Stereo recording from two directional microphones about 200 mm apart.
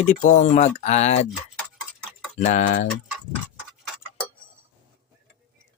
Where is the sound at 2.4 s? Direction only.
35° left (ahead or behind).